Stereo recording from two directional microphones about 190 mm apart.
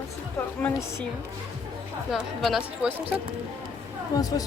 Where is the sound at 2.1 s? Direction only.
Centre (ahead or behind).